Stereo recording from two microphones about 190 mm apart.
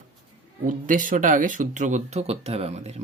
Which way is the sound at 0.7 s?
45° right (ahead or behind).